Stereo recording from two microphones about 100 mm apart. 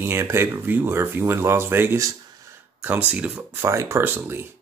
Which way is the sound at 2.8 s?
15° right (ahead or behind).